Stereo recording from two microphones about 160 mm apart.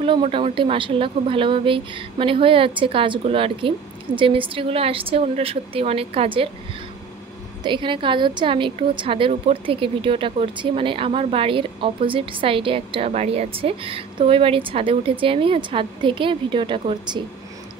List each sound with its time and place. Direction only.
0.0 s a woman's voice: 35° right (ahead or behind)
7.6 s a woman's voice: 30° right (ahead or behind)